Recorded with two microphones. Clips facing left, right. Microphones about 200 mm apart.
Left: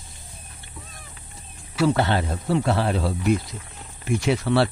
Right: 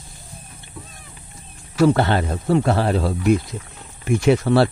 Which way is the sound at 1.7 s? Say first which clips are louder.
Right 4 dB; 50° right (ahead or behind).